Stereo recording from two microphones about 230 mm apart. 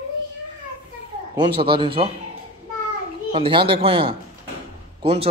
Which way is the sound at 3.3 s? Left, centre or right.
Right.